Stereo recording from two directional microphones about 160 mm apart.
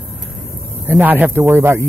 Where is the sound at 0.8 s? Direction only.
10° right (ahead or behind).